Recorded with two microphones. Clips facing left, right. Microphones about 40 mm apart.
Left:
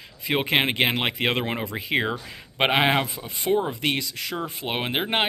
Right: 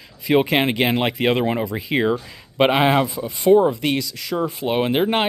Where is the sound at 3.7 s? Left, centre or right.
Left.